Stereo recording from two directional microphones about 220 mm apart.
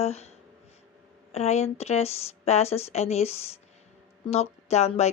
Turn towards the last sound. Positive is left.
turn(degrees=30)  # may be behind; listen again after turning